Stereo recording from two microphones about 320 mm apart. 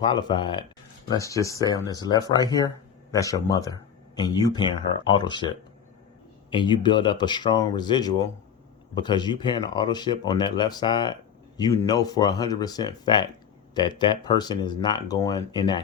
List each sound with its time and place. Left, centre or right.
0.0 s speech: centre